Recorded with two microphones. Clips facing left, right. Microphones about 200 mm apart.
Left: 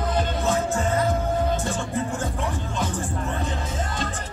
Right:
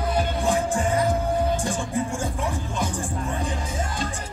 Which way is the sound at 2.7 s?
10° right (ahead or behind).